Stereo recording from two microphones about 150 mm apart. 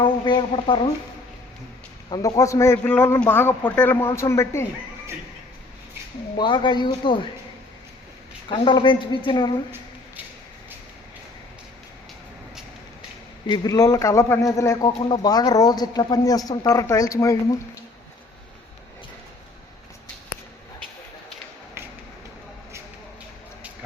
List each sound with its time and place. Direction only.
0.0 s a sound: 30° left (ahead or behind)
2.0 s a man's voice: 25° left (ahead or behind)
6.3 s a woman's voice: 30° left (ahead or behind)
8.4 s a woman's voice: 35° left (ahead or behind)
13.5 s a man's voice: 25° left (ahead or behind)
21.8 s a sound: 15° right (ahead or behind)